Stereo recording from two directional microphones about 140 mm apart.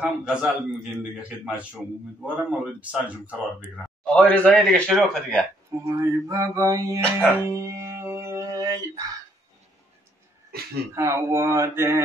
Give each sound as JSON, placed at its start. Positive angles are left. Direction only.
{"t": 0.0, "sound": "a man's voice", "side_deg": -5}
{"t": 2.2, "sound": "speech", "side_deg": -10}
{"t": 3.7, "sound": "a man's voice", "side_deg": 10}
{"t": 5.7, "sound": "a sound", "side_deg": -20}
{"t": 7.2, "sound": "music", "side_deg": -20}
{"t": 11.0, "sound": "a sound", "side_deg": -20}